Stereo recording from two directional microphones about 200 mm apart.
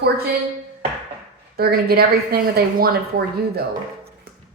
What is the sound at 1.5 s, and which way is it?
Speech, 50° right (ahead or behind).